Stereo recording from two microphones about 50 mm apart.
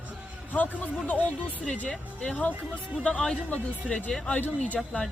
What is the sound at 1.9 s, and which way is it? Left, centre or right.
Speech, centre.